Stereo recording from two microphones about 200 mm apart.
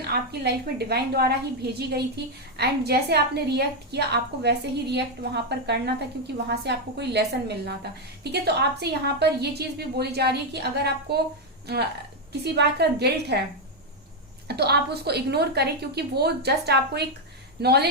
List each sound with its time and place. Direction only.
0.0 s a woman's voice: 55° right (ahead or behind)
14.4 s a woman's voice: 55° right (ahead or behind)